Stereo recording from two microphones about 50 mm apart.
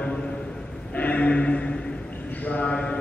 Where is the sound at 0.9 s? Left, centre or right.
Left.